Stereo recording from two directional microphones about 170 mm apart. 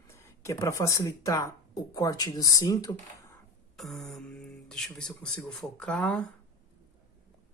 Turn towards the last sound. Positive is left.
turn(degrees=5)  # may be behind; listen again after turning